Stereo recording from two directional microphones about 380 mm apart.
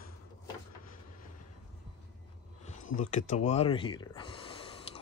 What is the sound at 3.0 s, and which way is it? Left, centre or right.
Speech, centre.